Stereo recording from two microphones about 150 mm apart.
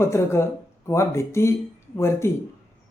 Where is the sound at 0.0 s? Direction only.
20° left (ahead or behind).